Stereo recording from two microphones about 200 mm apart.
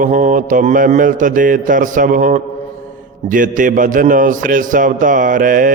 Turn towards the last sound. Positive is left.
turn(degrees=-40)  # may be behind; listen again after turning